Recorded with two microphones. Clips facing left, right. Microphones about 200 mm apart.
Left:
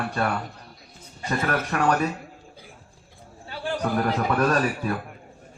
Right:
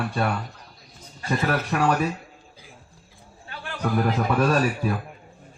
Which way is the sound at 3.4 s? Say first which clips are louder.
Left 8 dB; 30° left (ahead or behind).